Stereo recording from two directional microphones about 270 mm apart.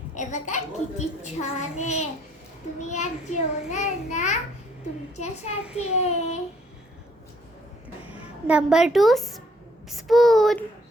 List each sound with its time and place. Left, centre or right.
0.2 s a child's voice: left
5.7 s a child's voice: left
8.4 s a woman's voice: centre